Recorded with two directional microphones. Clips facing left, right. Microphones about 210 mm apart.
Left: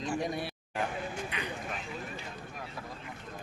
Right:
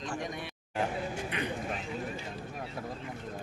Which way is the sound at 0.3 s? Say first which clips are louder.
Left 4 dB; 35° left (ahead or behind).